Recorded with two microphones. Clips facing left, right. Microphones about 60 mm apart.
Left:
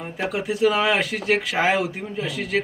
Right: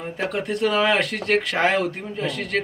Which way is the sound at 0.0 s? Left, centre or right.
Centre.